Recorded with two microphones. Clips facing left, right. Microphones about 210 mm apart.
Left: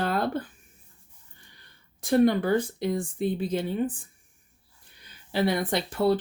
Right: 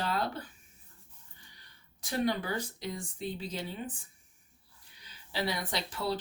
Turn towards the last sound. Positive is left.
turn(degrees=55)  # may be behind; listen again after turning